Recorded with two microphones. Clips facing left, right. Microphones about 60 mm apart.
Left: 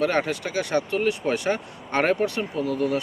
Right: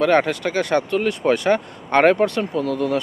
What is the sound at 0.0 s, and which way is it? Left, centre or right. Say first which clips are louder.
Speech: right 6 dB; right.